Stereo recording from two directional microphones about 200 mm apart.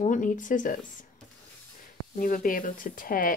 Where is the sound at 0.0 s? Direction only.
40° left (ahead or behind).